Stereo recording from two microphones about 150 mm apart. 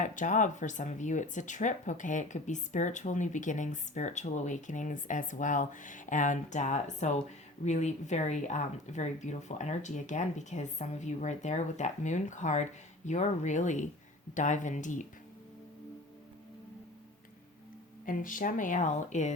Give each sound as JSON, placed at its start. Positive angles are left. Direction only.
{"t": 0.0, "sound": "speech", "side_deg": 60}
{"t": 18.0, "sound": "speech", "side_deg": 65}